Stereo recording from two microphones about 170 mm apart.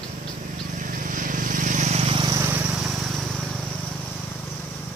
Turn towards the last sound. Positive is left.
turn(degrees=-5)  # may be behind; listen again after turning